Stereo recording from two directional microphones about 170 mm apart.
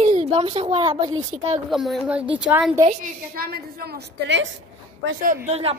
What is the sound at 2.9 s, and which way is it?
A woman's voice, 60° right (ahead or behind).